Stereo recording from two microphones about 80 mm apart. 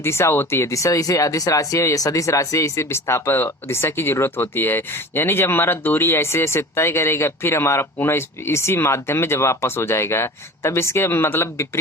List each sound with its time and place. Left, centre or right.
0.0 s speech: left